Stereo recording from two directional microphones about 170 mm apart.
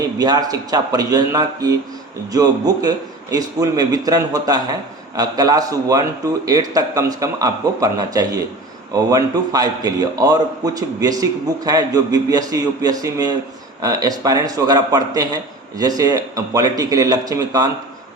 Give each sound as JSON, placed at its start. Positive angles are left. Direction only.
{"t": 0.2, "sound": "a man's voice", "side_deg": -25}